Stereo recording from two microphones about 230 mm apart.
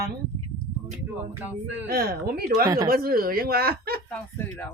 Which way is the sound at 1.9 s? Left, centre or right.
Right.